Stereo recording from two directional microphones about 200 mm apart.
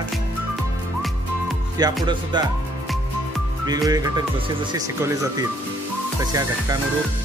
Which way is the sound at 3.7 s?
20° right (ahead or behind).